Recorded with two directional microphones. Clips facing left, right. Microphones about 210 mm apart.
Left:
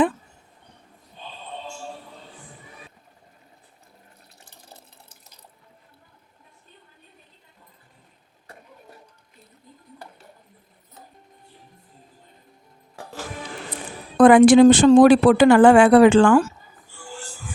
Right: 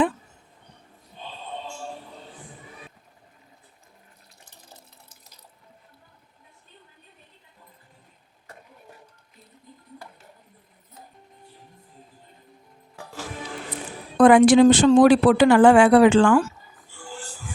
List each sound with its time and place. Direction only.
14.2 s speech: 55° left (ahead or behind)